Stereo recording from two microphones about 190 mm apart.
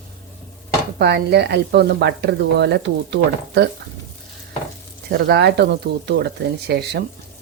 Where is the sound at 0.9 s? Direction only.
60° right (ahead or behind).